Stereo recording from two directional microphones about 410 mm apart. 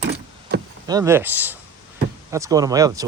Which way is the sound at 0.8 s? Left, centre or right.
Centre.